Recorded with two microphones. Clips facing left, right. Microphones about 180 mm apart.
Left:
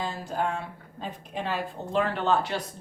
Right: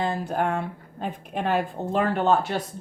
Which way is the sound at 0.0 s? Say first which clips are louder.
Right 4 dB; 60° right (ahead or behind).